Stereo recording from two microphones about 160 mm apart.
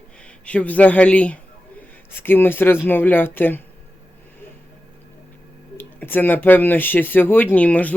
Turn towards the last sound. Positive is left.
turn(degrees=10)  # may be behind; listen again after turning